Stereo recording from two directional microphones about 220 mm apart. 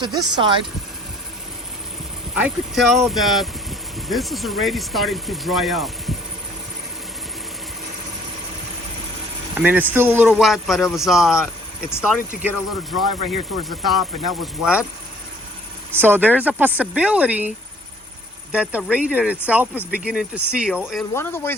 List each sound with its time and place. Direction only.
0.0 s speech: 20° right (ahead or behind)
2.3 s speech: 5° right (ahead or behind)
9.6 s speech: 10° right (ahead or behind)
11.9 s speech: 10° left (ahead or behind)
12.4 s speech: 5° right (ahead or behind)
15.9 s speech: 10° right (ahead or behind)
18.5 s speech: 5° right (ahead or behind)
21.2 s speech: 10° left (ahead or behind)